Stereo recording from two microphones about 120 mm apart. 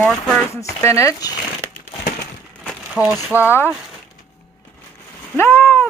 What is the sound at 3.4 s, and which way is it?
Speech, 20° left (ahead or behind).